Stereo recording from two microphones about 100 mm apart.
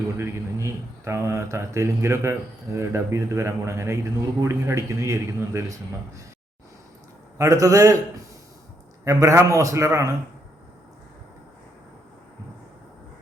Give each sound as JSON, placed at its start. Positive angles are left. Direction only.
{"t": 0.2, "sound": "speech", "side_deg": -30}
{"t": 7.3, "sound": "a man's voice", "side_deg": -35}